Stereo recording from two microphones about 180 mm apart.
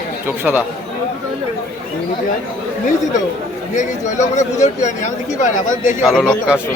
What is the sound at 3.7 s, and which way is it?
A man's voice, 40° left (ahead or behind).